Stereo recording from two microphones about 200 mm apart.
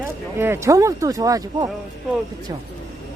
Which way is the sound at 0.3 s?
10° right (ahead or behind).